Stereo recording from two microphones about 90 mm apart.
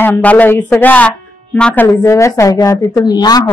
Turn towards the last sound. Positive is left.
turn(degrees=50)  # may be behind; listen again after turning